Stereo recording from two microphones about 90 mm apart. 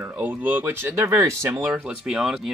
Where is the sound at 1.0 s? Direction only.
35° right (ahead or behind).